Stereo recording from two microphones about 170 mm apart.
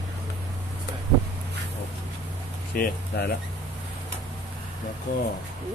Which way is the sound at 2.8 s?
70° left (ahead or behind).